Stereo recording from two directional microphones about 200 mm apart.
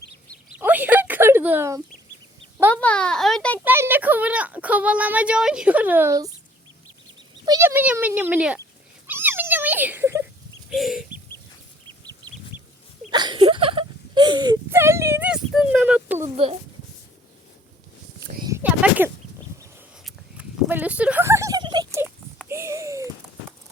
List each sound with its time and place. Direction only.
0.6 s a sound: 10° right (ahead or behind)
2.7 s speech: 5° left (ahead or behind)
3.6 s speech: 10° right (ahead or behind)
7.4 s speech: 15° right (ahead or behind)
9.0 s cat: 10° right (ahead or behind)
10.7 s chicken: centre (ahead or behind)
11.9 s bird: 20° right (ahead or behind)
13.1 s whimper: 20° right (ahead or behind)
18.4 s a sound: 10° right (ahead or behind)
22.4 s babbling: 15° right (ahead or behind)